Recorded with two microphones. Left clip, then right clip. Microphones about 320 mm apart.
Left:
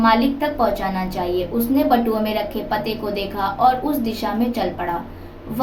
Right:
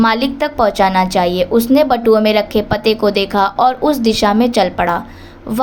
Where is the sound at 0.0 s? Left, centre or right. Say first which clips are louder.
Right 3 dB; right.